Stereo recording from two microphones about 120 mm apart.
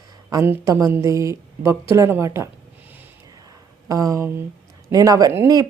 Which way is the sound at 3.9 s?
30° right (ahead or behind).